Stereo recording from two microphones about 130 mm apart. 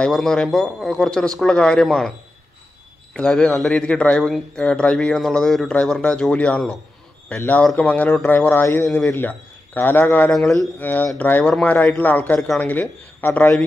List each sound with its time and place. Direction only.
0.0 s a man's voice: 5° left (ahead or behind)
8.6 s a man's voice: 25° left (ahead or behind); by 13.7 s 10° left (ahead or behind)